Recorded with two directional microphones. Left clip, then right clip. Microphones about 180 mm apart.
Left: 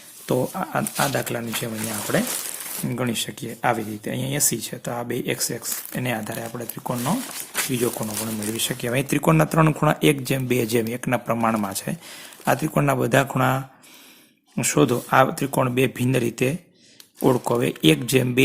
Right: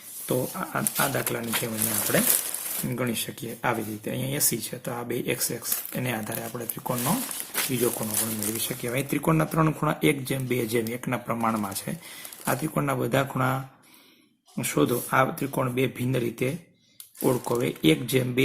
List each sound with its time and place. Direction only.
0.3 s speech: 40° left (ahead or behind)